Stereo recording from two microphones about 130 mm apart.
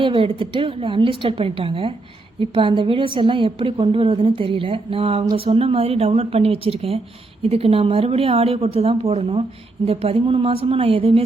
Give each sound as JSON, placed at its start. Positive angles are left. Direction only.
{"t": 0.0, "sound": "a woman's voice", "side_deg": -40}